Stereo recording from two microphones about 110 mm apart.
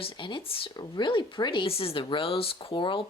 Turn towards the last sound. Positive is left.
turn(degrees=50)  # may be behind; listen again after turning